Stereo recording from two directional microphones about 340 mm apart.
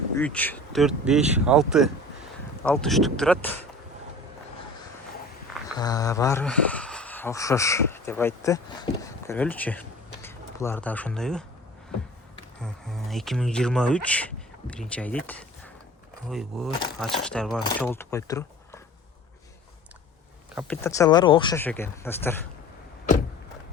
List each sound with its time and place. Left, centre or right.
0.2 s speech: centre
5.7 s speech: centre
12.6 s speech: centre
20.6 s speech: centre